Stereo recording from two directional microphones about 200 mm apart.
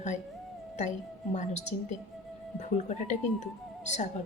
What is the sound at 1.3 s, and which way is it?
A woman's voice, 35° left (ahead or behind).